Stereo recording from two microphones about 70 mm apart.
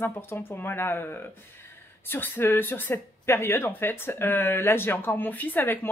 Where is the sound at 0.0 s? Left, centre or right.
Left.